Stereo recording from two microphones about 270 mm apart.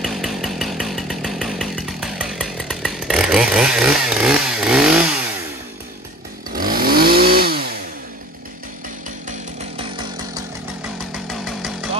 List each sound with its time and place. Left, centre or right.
0.0 s chainsaw: centre
6.5 s chainsaw: right